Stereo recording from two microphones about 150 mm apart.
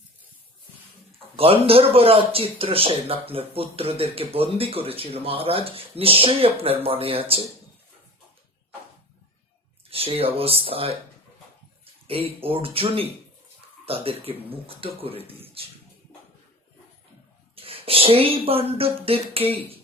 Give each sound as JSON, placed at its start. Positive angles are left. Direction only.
{"t": 1.4, "sound": "speech", "side_deg": -40}
{"t": 9.9, "sound": "speech", "side_deg": -40}
{"t": 12.0, "sound": "speech", "side_deg": -40}
{"t": 17.5, "sound": "speech", "side_deg": -40}